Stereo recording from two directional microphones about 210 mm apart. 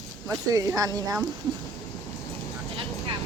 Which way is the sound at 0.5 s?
15° right (ahead or behind).